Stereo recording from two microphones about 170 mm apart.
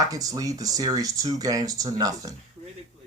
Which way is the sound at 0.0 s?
20° right (ahead or behind).